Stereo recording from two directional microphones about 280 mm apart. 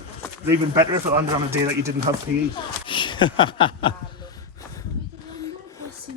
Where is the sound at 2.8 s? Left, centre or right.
Centre.